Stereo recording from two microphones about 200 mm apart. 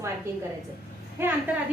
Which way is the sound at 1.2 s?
10° right (ahead or behind).